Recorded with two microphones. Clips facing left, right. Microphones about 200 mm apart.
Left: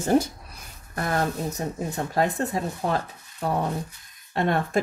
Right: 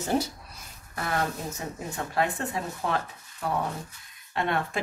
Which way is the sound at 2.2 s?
40° left (ahead or behind).